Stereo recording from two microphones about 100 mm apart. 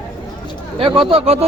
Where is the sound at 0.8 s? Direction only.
60° right (ahead or behind); by 1.4 s 90° right.